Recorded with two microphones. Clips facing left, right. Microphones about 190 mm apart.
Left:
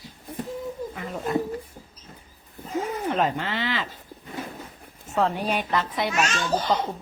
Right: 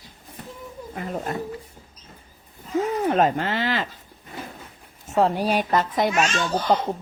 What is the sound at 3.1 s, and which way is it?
Speech, 45° right (ahead or behind).